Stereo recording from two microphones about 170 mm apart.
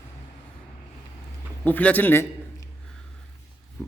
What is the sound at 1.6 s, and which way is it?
A man's voice, 10° left (ahead or behind).